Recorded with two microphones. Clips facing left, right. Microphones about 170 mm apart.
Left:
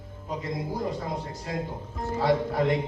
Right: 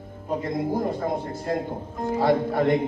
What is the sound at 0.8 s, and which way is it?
Speech, 55° right (ahead or behind).